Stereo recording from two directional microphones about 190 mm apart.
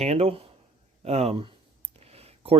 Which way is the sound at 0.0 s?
35° right (ahead or behind).